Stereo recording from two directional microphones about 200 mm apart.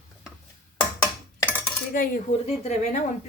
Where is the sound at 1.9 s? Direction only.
45° left (ahead or behind).